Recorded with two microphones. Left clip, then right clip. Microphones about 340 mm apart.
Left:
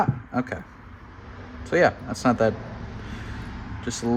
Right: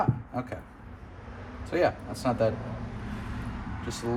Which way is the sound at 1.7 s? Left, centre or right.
Left.